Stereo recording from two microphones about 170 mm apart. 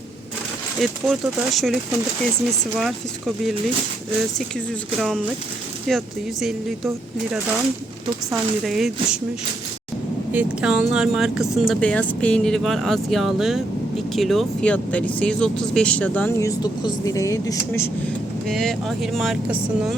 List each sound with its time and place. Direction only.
0.8 s speech: centre (ahead or behind)
4.9 s speech: centre (ahead or behind)
8.3 s speech: centre (ahead or behind)
10.3 s speech: 5° right (ahead or behind)
16.4 s speech: 20° left (ahead or behind)
18.4 s speech: centre (ahead or behind)